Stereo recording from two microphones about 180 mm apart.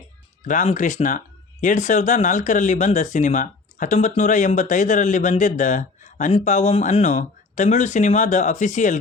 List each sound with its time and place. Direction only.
0.4 s speech: 45° left (ahead or behind)